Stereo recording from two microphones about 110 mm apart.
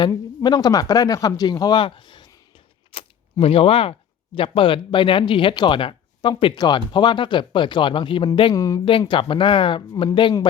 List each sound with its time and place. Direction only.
0.1 s speech: 35° left (ahead or behind)
2.9 s camera: 55° left (ahead or behind)
3.4 s speech: 55° left (ahead or behind)
8.5 s speech: 30° left (ahead or behind)
8.8 s speech: 50° left (ahead or behind)